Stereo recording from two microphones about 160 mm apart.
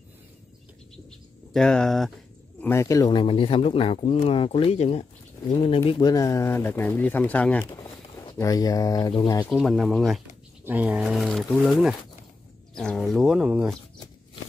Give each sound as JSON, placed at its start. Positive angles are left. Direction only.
{"t": 1.5, "sound": "speech", "side_deg": 5}
{"t": 2.6, "sound": "speech", "side_deg": 15}
{"t": 8.3, "sound": "speech", "side_deg": 20}
{"t": 9.5, "sound": "speech", "side_deg": 0}